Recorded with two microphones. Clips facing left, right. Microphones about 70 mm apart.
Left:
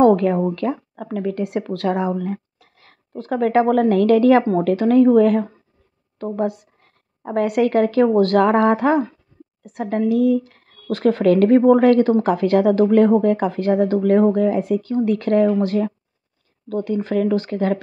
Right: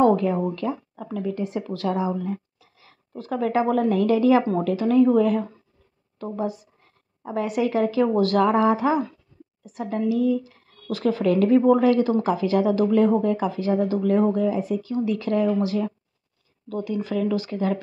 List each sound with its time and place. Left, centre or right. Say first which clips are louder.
0.0 s a woman's voice: left 5 dB; left
8.1 s a woman's voice: left 4 dB; left